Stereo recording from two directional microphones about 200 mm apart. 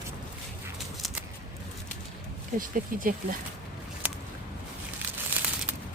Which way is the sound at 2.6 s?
45° right (ahead or behind).